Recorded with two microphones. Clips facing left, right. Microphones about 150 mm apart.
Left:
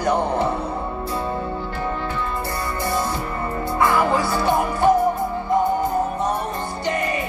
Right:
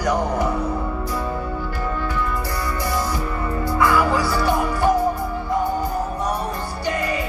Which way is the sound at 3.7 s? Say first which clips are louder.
Even; 25° left (ahead or behind).